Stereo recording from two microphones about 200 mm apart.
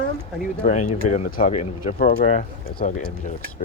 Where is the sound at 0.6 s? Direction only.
35° left (ahead or behind).